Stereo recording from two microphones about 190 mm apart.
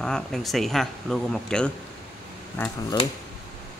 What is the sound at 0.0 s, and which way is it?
Speech, 5° left (ahead or behind).